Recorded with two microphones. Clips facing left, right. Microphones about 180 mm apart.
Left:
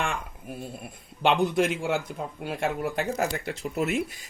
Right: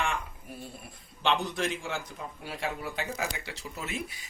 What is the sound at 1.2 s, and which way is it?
A man's voice, 55° left (ahead or behind).